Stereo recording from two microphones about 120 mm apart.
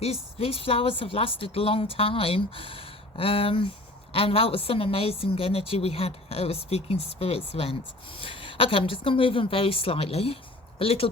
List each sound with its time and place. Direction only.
0.0 s a woman's voice: 55° left (ahead or behind)